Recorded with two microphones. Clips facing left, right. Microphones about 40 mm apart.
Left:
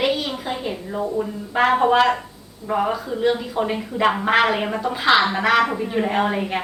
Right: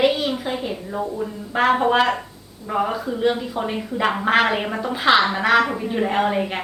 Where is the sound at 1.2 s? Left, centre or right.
Centre.